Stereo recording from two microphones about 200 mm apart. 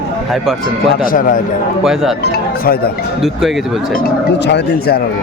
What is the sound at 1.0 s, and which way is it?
Speech, 45° left (ahead or behind).